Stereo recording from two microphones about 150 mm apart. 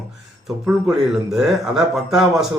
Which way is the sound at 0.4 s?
5° right (ahead or behind).